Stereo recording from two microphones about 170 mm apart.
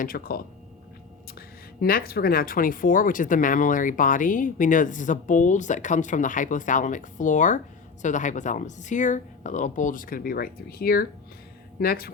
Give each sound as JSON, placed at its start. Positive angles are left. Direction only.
{"t": 0.0, "sound": "speech", "side_deg": 60}